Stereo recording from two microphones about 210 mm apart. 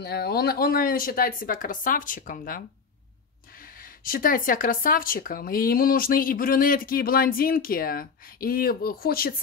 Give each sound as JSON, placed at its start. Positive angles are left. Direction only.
{"t": 0.0, "sound": "speech", "side_deg": 50}
{"t": 3.8, "sound": "speech", "side_deg": 45}